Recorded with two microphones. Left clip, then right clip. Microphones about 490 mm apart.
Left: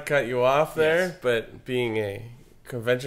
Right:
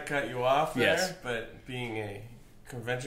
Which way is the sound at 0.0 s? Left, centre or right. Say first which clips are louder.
Left 8 dB; left.